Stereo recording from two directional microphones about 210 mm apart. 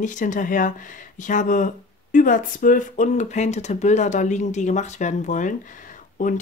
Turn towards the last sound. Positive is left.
turn(degrees=40)  # may be behind; listen again after turning